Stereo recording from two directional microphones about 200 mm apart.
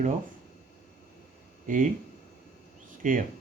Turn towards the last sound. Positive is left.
turn(degrees=-40)  # may be behind; listen again after turning